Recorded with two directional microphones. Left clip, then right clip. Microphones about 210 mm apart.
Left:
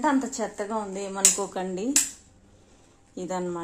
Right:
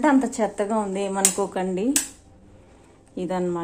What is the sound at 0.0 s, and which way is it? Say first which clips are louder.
Speech: right 5 dB; 15° right (ahead or behind).